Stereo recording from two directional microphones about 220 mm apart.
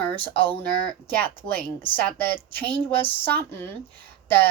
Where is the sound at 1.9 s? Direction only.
10° left (ahead or behind).